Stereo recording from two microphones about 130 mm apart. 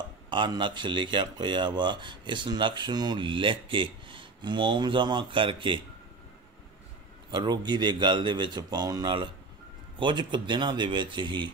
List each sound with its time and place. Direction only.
0.3 s speech: 35° right (ahead or behind)
7.2 s speech: 35° right (ahead or behind)